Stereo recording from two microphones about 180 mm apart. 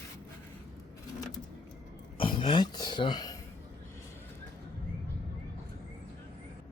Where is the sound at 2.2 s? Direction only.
25° left (ahead or behind).